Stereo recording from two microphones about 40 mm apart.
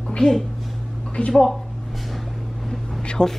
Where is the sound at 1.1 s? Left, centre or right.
Left.